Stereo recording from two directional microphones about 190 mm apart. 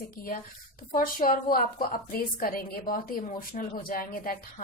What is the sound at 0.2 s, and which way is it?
A woman's voice, 50° left (ahead or behind).